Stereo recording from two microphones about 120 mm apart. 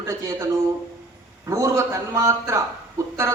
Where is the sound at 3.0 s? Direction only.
25° right (ahead or behind).